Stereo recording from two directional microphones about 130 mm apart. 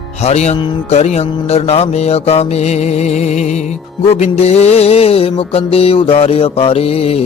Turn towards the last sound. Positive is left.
turn(degrees=50)  # may be behind; listen again after turning